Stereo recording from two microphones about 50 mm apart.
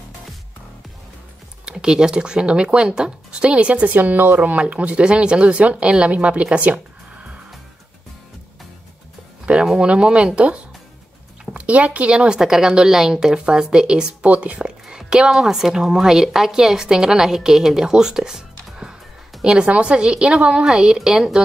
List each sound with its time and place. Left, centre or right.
1.7 s speech: centre
3.9 s speech: right
4.4 s speech: right
9.8 s speech: right
12.4 s speech: centre; by 14.6 s right
14.6 s a sound: centre
15.3 s speech: centre